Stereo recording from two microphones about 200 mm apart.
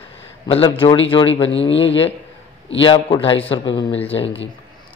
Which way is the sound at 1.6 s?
65° left (ahead or behind).